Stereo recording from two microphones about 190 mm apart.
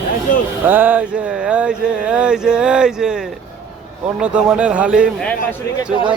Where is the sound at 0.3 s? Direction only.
45° left (ahead or behind).